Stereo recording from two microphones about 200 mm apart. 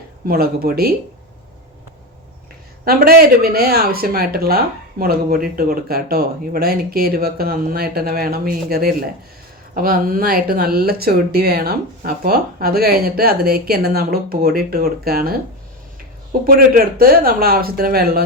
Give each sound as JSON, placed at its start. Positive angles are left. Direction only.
{"t": 0.3, "sound": "speech", "side_deg": -50}
{"t": 2.8, "sound": "speech", "side_deg": -50}
{"t": 16.4, "sound": "speech", "side_deg": -45}